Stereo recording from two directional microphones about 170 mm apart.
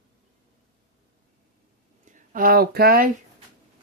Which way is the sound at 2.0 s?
50° right (ahead or behind).